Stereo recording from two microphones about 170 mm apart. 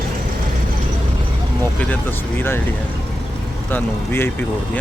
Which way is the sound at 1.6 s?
10° left (ahead or behind).